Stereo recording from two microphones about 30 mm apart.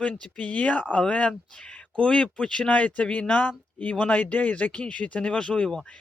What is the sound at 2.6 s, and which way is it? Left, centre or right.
Speech, left.